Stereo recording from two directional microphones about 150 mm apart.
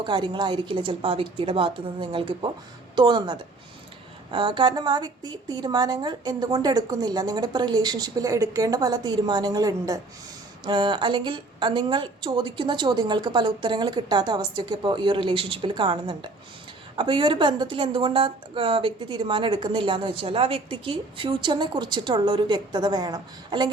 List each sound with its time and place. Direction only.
0.0 s a woman's voice: 30° right (ahead or behind)